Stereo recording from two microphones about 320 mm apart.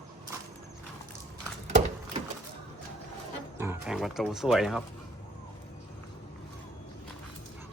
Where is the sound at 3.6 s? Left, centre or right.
Centre.